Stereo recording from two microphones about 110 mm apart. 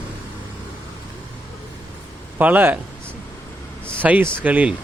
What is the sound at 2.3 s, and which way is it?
Speech, 15° right (ahead or behind).